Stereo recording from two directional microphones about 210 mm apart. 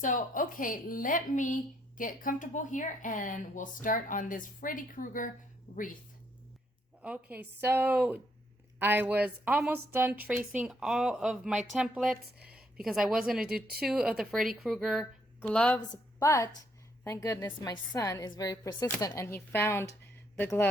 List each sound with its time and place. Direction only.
0.0 s speech: 40° left (ahead or behind)
7.0 s a woman's voice: 5° right (ahead or behind)
12.5 s a sound: centre (ahead or behind)
13.2 s a woman's voice: 5° right (ahead or behind)